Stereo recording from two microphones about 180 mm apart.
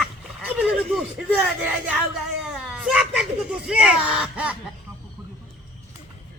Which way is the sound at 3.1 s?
5° right (ahead or behind).